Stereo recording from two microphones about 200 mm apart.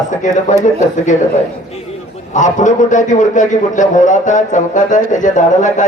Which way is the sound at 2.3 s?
40° left (ahead or behind).